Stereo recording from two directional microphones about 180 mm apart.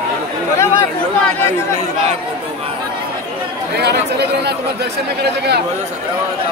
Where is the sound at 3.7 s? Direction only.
65° right (ahead or behind).